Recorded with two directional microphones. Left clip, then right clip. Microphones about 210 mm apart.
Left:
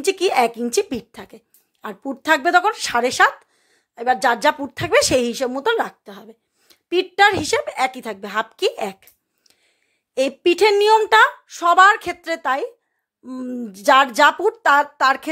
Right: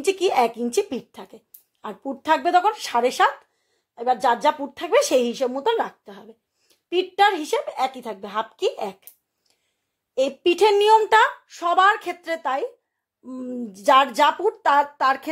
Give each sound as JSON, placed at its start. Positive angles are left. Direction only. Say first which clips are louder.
{"t": 0.0, "sound": "a woman's voice", "louder": "left 2 dB", "side_deg": 15}